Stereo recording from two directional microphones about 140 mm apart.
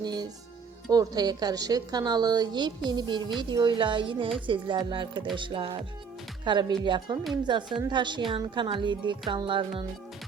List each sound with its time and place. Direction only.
0.0 s a woman's voice: 30° right (ahead or behind)